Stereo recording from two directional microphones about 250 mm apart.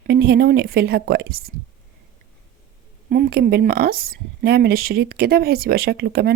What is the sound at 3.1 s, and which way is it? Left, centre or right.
A woman's voice, right.